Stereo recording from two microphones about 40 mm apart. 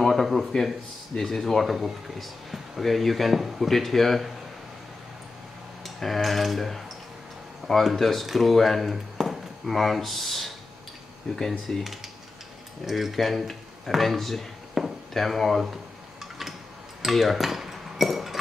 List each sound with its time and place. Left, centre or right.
0.0 s a sound: centre
0.5 s speech: centre
5.9 s speech: centre
14.8 s chop: centre
15.1 s speech: centre
15.6 s a sound: centre
17.0 s cutlery: centre